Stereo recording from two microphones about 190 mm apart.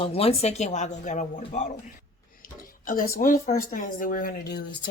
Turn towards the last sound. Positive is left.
turn(degrees=55)  # may be behind; listen again after turning